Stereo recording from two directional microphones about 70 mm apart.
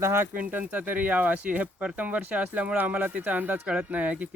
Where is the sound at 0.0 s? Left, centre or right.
Right.